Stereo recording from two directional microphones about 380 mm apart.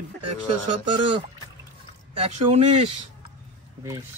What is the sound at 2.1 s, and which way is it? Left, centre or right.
Speech, centre.